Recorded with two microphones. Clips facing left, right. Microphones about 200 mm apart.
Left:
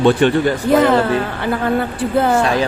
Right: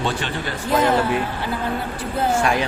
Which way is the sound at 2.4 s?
35° left (ahead or behind).